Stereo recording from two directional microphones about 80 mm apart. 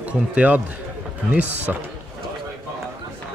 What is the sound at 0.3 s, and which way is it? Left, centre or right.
Speech, centre.